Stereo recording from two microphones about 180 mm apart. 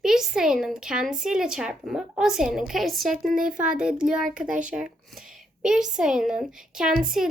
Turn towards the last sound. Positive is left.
turn(degrees=-5)  # may be behind; listen again after turning